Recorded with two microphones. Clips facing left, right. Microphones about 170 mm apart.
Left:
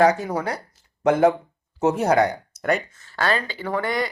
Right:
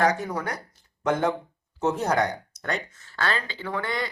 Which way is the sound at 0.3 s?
30° left (ahead or behind).